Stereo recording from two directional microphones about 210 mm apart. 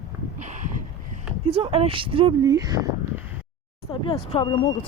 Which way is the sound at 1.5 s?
25° right (ahead or behind).